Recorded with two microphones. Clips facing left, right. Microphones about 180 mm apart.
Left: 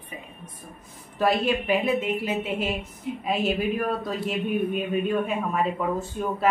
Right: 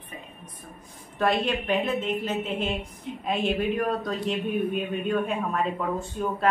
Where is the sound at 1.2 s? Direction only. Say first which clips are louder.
Left 2 dB; 5° left (ahead or behind).